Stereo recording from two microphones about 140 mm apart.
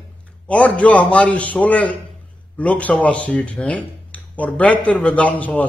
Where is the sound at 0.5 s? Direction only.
10° left (ahead or behind).